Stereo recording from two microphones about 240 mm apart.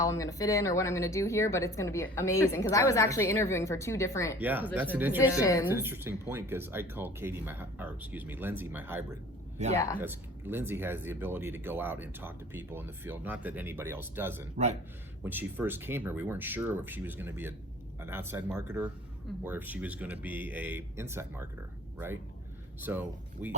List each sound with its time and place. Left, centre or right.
0.0 s speech: centre
4.4 s speech: centre
5.4 s speech: centre
5.6 s speech: centre
14.5 s a man's voice: right
15.2 s speech: centre